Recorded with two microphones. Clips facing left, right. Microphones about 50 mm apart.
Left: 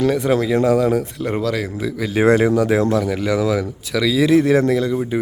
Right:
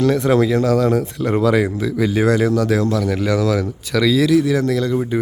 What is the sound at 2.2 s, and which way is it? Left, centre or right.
Speech, left.